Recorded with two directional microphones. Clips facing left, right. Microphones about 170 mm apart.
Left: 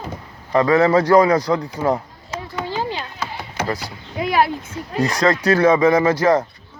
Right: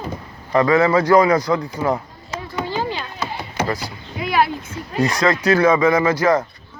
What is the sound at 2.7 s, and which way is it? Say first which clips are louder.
Chop: even; 30° left (ahead or behind).